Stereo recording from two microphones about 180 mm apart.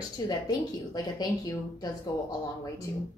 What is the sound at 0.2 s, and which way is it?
Speech, 20° left (ahead or behind).